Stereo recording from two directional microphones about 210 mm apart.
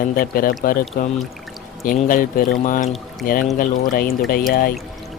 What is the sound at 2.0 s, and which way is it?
Music, 40° left (ahead or behind).